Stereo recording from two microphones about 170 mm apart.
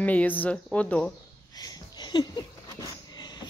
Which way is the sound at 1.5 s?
25° left (ahead or behind).